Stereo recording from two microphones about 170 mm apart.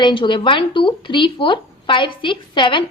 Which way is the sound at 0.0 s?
30° left (ahead or behind).